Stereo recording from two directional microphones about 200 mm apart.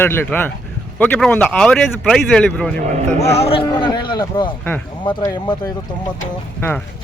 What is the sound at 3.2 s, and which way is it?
A man's voice, 30° left (ahead or behind).